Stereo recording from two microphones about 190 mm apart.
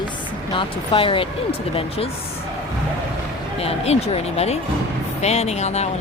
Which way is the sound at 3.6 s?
35° left (ahead or behind).